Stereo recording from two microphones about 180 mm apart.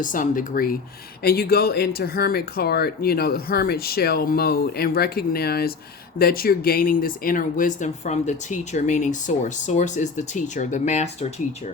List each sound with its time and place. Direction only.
0.0 s speech: 50° left (ahead or behind)